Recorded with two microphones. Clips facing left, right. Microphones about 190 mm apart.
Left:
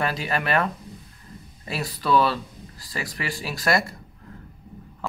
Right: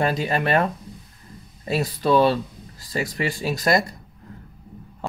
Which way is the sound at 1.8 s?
25° right (ahead or behind).